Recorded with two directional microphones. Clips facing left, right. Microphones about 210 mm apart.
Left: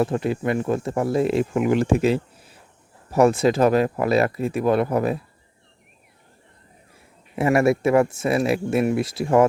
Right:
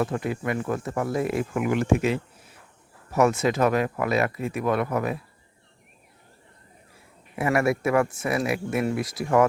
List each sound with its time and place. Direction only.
0.0 s speech: 30° left (ahead or behind)
7.3 s speech: 25° left (ahead or behind)